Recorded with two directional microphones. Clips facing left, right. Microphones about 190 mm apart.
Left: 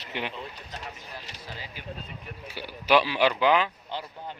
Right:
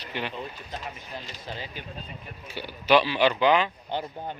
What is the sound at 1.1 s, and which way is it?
Speech, 25° right (ahead or behind).